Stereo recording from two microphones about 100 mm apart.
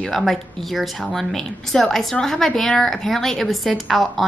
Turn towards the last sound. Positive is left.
turn(degrees=0)  # may be behind; listen again after turning